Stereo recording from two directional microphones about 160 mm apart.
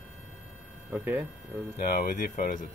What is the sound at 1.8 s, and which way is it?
Speech, 70° left (ahead or behind).